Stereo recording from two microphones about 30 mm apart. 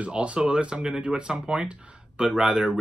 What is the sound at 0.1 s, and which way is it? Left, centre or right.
Speech, right.